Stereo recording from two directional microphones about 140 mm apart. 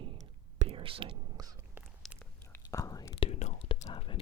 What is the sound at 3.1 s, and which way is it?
Whispering, 45° left (ahead or behind).